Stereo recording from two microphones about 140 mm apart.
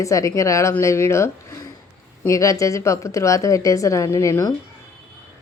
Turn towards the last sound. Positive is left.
turn(degrees=20)  # may be behind; listen again after turning